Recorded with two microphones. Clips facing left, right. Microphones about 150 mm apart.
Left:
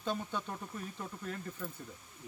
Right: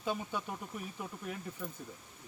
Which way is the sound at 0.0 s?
10° right (ahead or behind).